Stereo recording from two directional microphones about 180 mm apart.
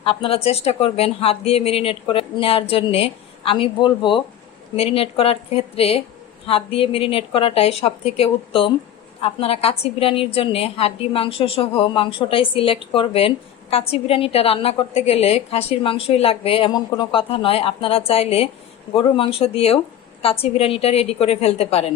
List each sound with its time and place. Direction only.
0.0 s a woman's voice: 30° left (ahead or behind)